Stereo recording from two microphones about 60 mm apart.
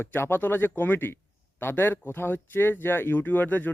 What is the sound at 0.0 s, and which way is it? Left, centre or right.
Speech, left.